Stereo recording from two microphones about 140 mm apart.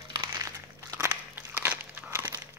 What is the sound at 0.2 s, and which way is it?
Crumpling, 20° right (ahead or behind).